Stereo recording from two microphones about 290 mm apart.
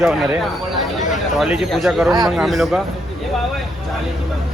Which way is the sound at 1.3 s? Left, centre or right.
Centre.